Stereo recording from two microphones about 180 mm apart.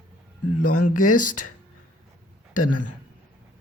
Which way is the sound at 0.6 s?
45° left (ahead or behind).